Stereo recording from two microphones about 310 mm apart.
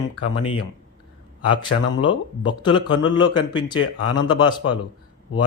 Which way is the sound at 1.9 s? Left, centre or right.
Centre.